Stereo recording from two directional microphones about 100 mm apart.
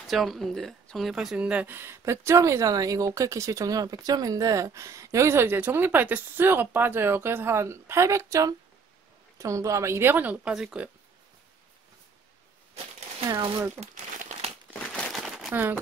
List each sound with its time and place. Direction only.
0.0 s speech: centre (ahead or behind)
13.3 s speech: 40° right (ahead or behind)
15.1 s crumpling: centre (ahead or behind)
15.5 s speech: 20° right (ahead or behind)